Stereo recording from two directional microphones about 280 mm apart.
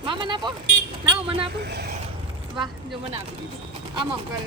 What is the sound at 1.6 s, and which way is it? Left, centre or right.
Speech, right.